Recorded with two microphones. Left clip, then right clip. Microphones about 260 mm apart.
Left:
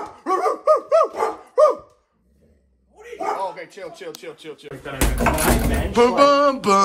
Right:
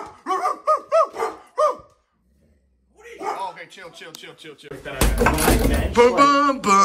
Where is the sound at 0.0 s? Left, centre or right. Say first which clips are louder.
Left 2 dB; right.